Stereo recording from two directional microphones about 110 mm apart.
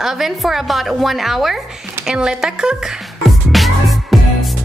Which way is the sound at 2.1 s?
5° right (ahead or behind).